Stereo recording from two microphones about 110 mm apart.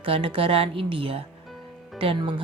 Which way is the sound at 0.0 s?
55° right (ahead or behind).